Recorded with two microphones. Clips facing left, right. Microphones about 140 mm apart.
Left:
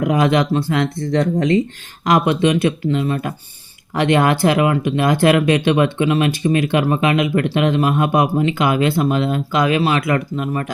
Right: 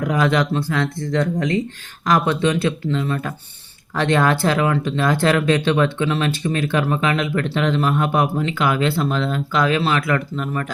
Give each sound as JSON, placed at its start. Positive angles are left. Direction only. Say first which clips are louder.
{"t": 0.0, "sound": "speech", "louder": "left 3 dB", "side_deg": 20}